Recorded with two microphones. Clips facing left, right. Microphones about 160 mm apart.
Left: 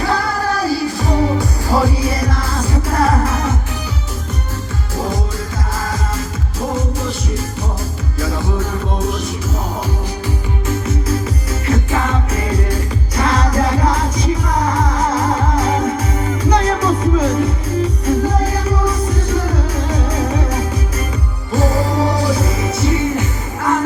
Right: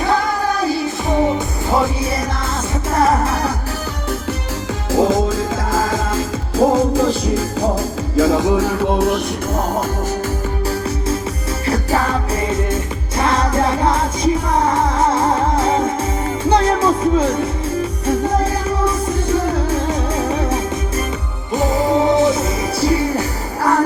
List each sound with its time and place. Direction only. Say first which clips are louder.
0.6 s music: left 1 dB; 20° right (ahead or behind)
4.9 s music: right 7 dB; 90° right
8.1 s music: right 8 dB; 90° right
10.7 s music: left 2 dB; 30° right (ahead or behind)